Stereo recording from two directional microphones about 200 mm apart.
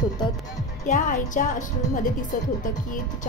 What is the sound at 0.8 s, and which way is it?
Speech, 40° left (ahead or behind).